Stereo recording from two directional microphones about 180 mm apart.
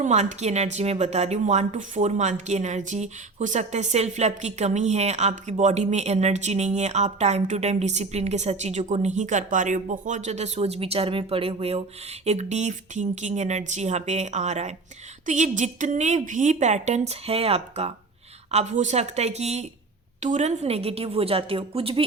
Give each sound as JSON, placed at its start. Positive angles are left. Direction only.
{"t": 0.0, "sound": "speech", "side_deg": -40}